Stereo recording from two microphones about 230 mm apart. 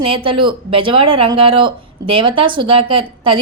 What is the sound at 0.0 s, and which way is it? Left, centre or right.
Speech, right.